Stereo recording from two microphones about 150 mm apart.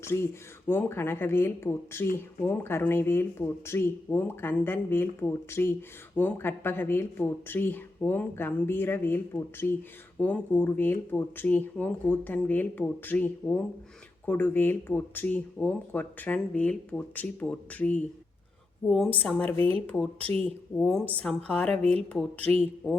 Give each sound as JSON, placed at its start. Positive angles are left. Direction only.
{"t": 0.0, "sound": "speech", "side_deg": 15}